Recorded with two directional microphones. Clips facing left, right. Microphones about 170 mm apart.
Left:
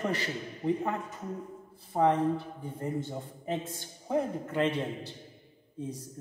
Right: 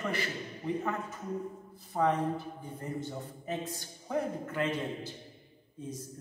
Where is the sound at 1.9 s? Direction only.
25° left (ahead or behind).